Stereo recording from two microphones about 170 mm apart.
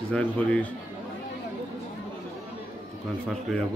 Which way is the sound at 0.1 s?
5° left (ahead or behind).